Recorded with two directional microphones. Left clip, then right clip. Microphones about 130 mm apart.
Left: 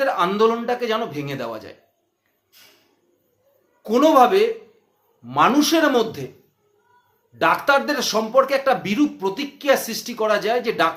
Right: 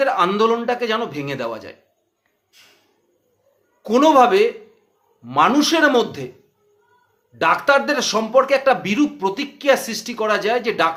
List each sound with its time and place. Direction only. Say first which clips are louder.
0.0 s speech: right 1 dB; 20° right (ahead or behind)
3.8 s speech: right 1 dB; 20° right (ahead or behind)
7.3 s speech: right 2 dB; 20° right (ahead or behind)